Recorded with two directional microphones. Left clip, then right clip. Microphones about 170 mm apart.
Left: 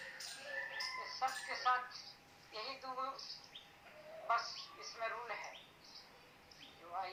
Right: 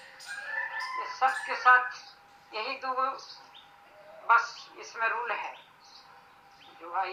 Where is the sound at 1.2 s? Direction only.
20° right (ahead or behind).